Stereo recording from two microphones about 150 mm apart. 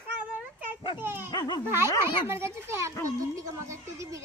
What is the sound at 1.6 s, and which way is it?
Speech, 15° right (ahead or behind).